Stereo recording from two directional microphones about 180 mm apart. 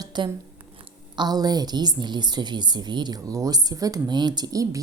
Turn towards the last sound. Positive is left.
turn(degrees=-20)  # may be behind; listen again after turning